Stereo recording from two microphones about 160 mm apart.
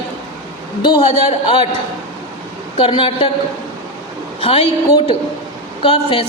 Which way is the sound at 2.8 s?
35° left (ahead or behind).